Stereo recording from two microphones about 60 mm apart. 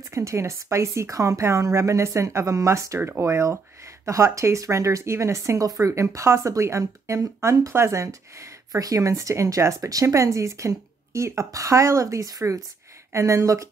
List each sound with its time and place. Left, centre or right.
0.1 s speech: right
5.7 s speech: right
7.7 s speech: right
13.1 s speech: right